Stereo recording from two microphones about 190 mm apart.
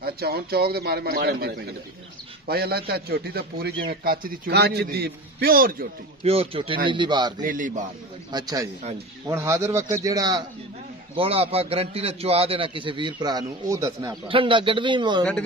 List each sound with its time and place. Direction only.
0.0 s a man's voice: 55° right (ahead or behind)
6.2 s a man's voice: 30° right (ahead or behind)
7.4 s a man's voice: 45° right (ahead or behind)
8.3 s a man's voice: 20° right (ahead or behind)
11.1 s a man's voice: 30° right (ahead or behind)